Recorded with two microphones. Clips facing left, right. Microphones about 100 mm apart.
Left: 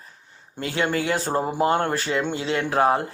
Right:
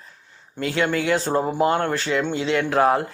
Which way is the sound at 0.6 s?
35° left (ahead or behind).